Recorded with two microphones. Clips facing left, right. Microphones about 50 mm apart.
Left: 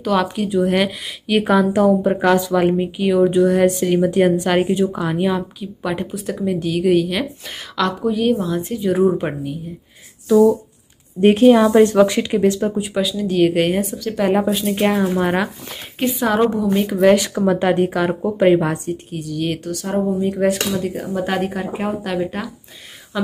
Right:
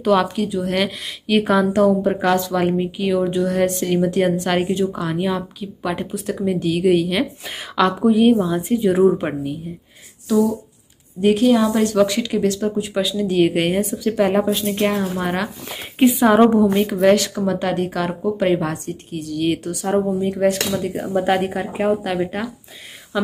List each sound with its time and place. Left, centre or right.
0.0 s speech: centre
0.5 s speech: centre
11.1 s speech: left; by 12.9 s centre
12.9 s speech: centre
15.7 s a woman's voice: centre
16.7 s speech: centre
17.1 s a woman's voice: centre
20.9 s speech: centre